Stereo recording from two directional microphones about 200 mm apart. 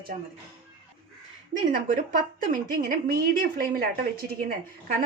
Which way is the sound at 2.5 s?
45° right (ahead or behind).